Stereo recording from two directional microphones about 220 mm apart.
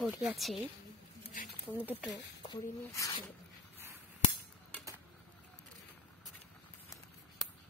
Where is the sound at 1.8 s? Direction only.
10° right (ahead or behind).